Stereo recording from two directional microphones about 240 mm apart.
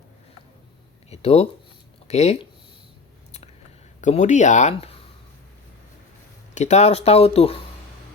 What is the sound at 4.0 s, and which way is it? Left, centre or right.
Speech, left.